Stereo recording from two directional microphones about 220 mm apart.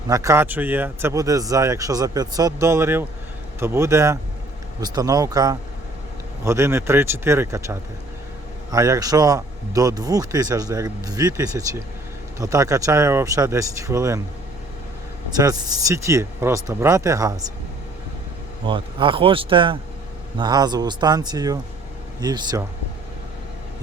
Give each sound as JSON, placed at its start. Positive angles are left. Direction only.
{"t": 0.1, "sound": "a man's voice", "side_deg": -15}
{"t": 15.4, "sound": "a man's voice", "side_deg": -15}
{"t": 18.6, "sound": "a man's voice", "side_deg": -20}